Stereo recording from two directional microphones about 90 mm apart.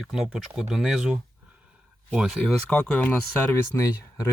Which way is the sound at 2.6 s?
15° left (ahead or behind).